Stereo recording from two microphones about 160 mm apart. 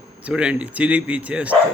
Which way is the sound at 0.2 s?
5° right (ahead or behind).